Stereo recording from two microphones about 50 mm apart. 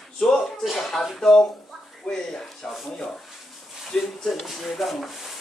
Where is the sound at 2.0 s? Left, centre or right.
Centre.